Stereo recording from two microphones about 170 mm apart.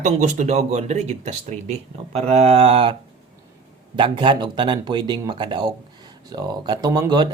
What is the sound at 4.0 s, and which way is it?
Speech, 30° right (ahead or behind).